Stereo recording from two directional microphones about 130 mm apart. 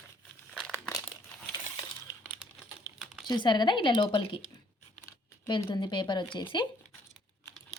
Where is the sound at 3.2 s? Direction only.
35° left (ahead or behind).